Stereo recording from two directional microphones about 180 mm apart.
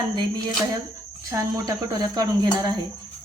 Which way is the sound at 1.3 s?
20° right (ahead or behind).